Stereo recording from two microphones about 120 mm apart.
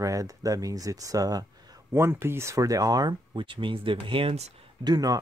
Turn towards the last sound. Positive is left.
turn(degrees=-35)  # may be behind; listen again after turning